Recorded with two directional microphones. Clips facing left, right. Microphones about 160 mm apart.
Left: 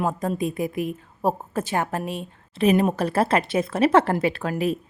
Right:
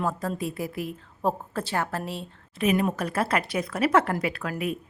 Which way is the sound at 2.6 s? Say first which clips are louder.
Left 5 dB; 30° left (ahead or behind).